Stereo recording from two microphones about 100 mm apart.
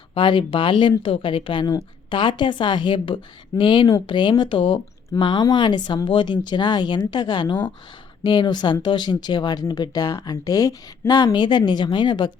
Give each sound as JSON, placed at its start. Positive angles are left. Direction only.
{"t": 0.1, "sound": "speech", "side_deg": 55}
{"t": 1.6, "sound": "speech", "side_deg": 50}
{"t": 5.2, "sound": "speech", "side_deg": 45}